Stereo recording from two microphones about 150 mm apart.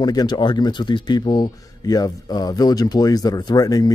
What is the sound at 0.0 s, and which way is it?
Speech, 25° left (ahead or behind).